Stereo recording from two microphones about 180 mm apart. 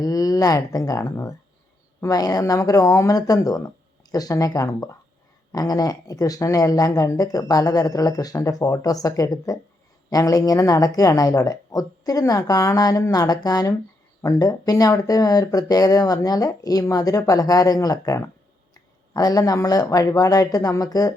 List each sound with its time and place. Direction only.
0.0 s speech: 20° left (ahead or behind)